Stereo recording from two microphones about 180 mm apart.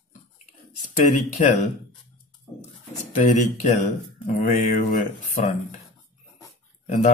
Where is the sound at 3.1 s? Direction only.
40° left (ahead or behind).